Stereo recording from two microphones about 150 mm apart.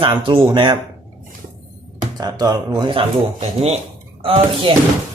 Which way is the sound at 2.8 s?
35° right (ahead or behind).